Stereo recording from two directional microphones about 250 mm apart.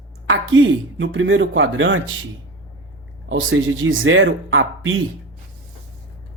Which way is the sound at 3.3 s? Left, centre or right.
Right.